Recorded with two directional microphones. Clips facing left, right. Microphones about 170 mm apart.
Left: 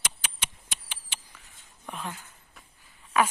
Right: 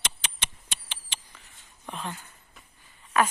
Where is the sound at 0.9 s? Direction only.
10° left (ahead or behind).